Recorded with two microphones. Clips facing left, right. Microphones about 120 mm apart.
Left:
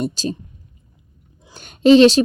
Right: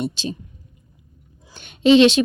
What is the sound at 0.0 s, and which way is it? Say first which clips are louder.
Speech: left 3 dB; 40° left (ahead or behind).